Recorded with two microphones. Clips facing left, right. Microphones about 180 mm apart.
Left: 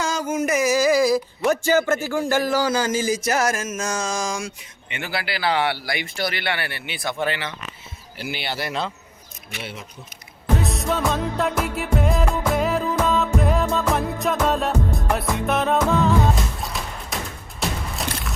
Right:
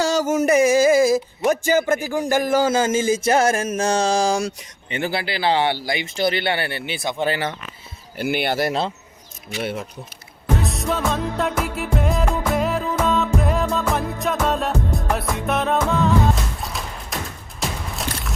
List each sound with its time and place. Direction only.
0.3 s speech: 35° right (ahead or behind)
7.3 s speech: 40° right (ahead or behind)
8.2 s speech: 50° right (ahead or behind)
9.6 s speech: 55° right (ahead or behind)
10.6 s music: centre (ahead or behind)